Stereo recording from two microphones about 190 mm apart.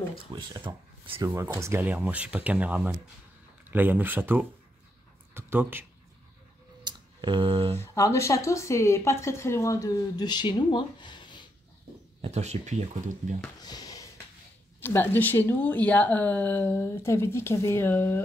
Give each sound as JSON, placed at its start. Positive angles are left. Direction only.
{"t": 0.1, "sound": "speech", "side_deg": -20}
{"t": 1.3, "sound": "speech", "side_deg": -15}
{"t": 6.8, "sound": "a sound", "side_deg": -20}
{"t": 7.8, "sound": "a woman's voice", "side_deg": 15}
{"t": 12.2, "sound": "speech", "side_deg": -35}
{"t": 13.6, "sound": "a sound", "side_deg": 20}
{"t": 14.8, "sound": "a woman's voice", "side_deg": 10}